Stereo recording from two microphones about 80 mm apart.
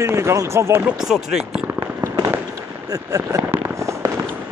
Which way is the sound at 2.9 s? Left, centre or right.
Right.